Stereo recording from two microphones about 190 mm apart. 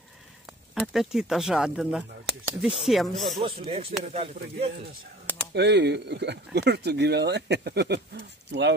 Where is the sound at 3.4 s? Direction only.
30° right (ahead or behind).